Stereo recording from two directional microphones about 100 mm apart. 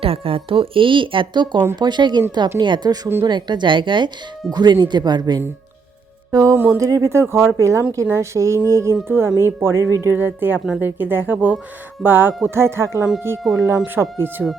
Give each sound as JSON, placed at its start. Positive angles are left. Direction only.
{"t": 0.0, "sound": "speech", "side_deg": -70}
{"t": 6.3, "sound": "music", "side_deg": -35}
{"t": 6.6, "sound": "speech", "side_deg": -30}
{"t": 13.4, "sound": "speech", "side_deg": 0}
{"t": 13.8, "sound": "speech", "side_deg": -20}